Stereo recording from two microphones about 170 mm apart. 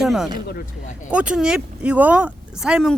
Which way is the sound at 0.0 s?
5° right (ahead or behind).